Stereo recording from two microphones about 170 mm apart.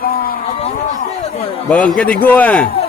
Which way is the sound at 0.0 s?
60° left (ahead or behind).